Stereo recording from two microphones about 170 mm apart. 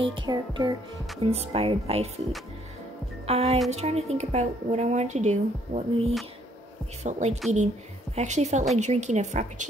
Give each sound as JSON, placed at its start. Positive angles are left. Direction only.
{"t": 0.0, "sound": "music", "side_deg": -30}
{"t": 1.2, "sound": "a woman's voice", "side_deg": -35}
{"t": 3.3, "sound": "a woman's voice", "side_deg": -35}